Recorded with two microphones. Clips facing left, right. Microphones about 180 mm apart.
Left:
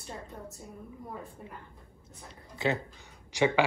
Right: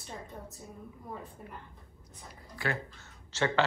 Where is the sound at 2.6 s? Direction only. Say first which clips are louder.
Left 5 dB; 20° left (ahead or behind).